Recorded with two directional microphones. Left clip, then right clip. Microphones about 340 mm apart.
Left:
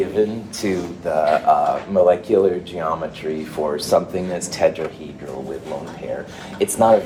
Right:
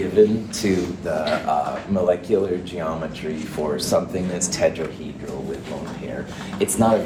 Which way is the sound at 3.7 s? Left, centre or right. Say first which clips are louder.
Left 3 dB; left.